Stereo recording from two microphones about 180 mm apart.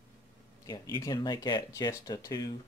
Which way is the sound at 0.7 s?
20° left (ahead or behind).